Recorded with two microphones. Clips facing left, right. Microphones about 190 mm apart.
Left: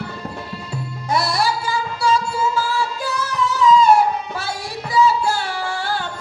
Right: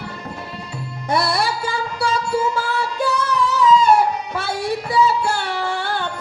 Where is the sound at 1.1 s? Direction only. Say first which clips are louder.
Even; 60° right (ahead or behind).